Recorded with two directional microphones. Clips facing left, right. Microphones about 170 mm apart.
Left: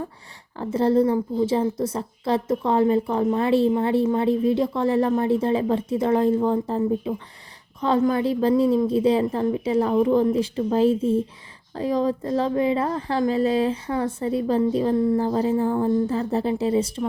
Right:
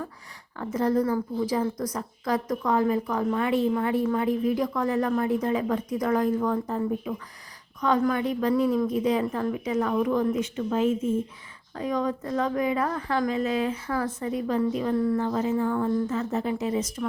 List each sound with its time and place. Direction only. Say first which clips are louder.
0.5 s a woman's voice: left 5 dB; 30° left (ahead or behind)